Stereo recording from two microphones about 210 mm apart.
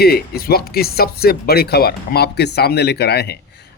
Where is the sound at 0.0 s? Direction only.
45° left (ahead or behind).